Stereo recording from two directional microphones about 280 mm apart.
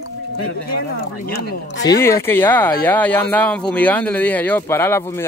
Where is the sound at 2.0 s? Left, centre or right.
Centre.